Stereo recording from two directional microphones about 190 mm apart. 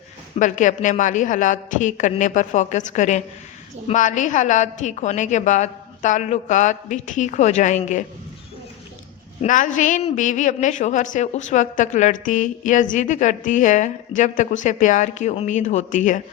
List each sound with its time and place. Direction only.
0.3 s a woman's voice: 40° left (ahead or behind)
9.4 s a woman's voice: 40° left (ahead or behind)